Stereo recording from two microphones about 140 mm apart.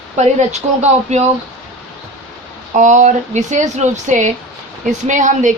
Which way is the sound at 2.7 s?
60° right (ahead or behind).